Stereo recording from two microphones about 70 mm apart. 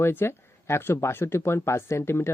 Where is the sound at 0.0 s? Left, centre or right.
Left.